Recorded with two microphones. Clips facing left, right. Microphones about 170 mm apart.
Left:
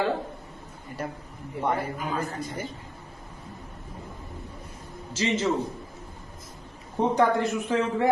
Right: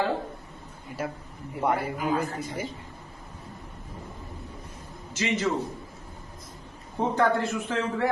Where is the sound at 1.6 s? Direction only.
10° right (ahead or behind).